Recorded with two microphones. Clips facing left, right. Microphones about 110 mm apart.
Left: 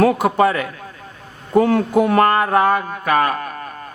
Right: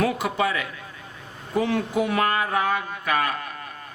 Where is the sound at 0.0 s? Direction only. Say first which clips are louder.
Left 9 dB; 45° left (ahead or behind).